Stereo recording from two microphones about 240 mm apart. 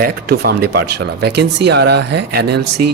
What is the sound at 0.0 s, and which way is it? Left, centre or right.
Speech, right.